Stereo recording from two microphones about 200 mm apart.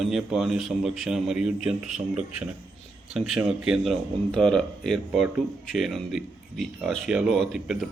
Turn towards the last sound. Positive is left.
turn(degrees=0)  # may be behind; listen again after turning